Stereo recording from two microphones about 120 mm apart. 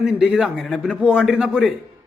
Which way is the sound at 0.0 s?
5° right (ahead or behind).